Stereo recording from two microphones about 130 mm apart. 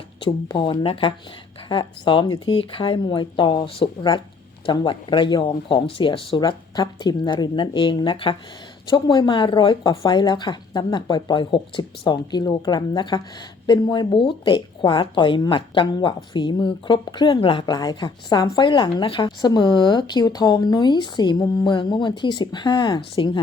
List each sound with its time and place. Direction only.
0.4 s a woman's voice: 35° left (ahead or behind)